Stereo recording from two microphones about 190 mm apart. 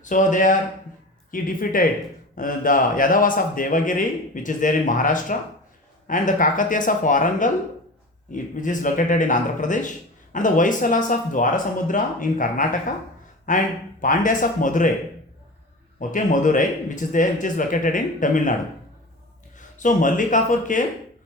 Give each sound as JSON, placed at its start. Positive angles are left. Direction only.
{"t": 0.0, "sound": "speech", "side_deg": 40}
{"t": 16.0, "sound": "speech", "side_deg": 45}
{"t": 19.5, "sound": "speech", "side_deg": 40}